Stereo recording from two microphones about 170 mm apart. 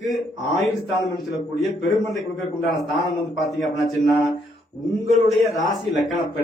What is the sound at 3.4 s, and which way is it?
A man's voice, centre (ahead or behind).